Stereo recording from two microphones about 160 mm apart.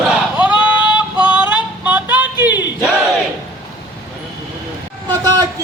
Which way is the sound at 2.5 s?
25° left (ahead or behind).